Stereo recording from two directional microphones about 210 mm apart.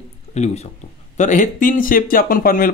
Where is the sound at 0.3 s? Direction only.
30° left (ahead or behind).